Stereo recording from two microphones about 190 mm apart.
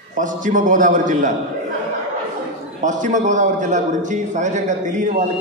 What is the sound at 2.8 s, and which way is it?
A man's voice, 40° right (ahead or behind).